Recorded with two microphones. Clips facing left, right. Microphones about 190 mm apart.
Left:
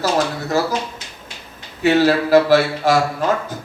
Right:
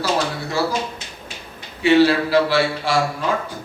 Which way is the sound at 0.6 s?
45° left (ahead or behind).